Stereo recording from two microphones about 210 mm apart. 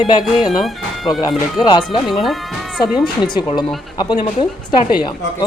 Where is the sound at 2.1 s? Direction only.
Centre (ahead or behind).